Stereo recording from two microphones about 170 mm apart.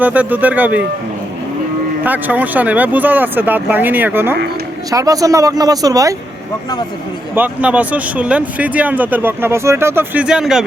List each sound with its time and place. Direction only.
0.0 s speech: 10° right (ahead or behind)
2.0 s speech: 10° right (ahead or behind)
7.3 s speech: 10° right (ahead or behind)